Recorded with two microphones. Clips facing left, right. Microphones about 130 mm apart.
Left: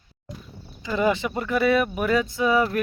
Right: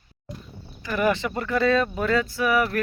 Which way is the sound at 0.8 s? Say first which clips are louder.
Left 1 dB; 15° left (ahead or behind).